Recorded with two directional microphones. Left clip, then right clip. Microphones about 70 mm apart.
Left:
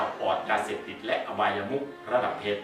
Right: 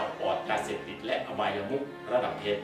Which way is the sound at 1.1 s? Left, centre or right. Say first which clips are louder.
Left 3 dB; centre.